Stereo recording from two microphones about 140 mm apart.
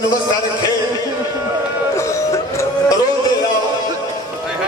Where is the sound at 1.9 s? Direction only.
20° left (ahead or behind).